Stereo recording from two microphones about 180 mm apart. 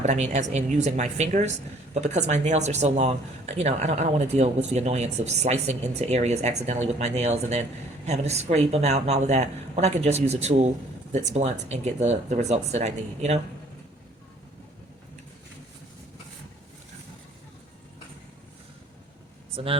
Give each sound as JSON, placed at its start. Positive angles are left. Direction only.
{"t": 0.0, "sound": "speech", "side_deg": -40}
{"t": 19.5, "sound": "speech", "side_deg": -30}